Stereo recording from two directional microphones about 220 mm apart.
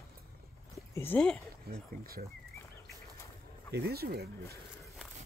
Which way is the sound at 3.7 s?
45° right (ahead or behind).